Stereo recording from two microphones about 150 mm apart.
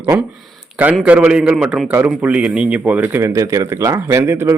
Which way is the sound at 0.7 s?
10° right (ahead or behind).